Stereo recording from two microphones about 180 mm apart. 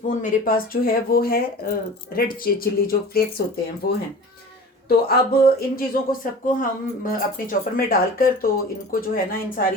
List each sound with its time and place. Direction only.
0.2 s speech: 50° left (ahead or behind)
4.9 s speech: 60° left (ahead or behind)